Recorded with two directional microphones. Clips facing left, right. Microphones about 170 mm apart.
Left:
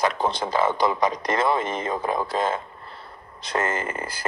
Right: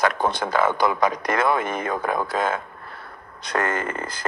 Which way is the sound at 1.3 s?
25° left (ahead or behind).